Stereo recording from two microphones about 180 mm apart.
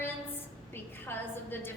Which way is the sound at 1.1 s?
10° left (ahead or behind).